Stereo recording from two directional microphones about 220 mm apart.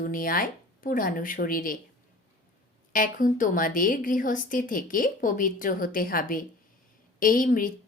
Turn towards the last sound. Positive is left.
turn(degrees=40)  # may be behind; listen again after turning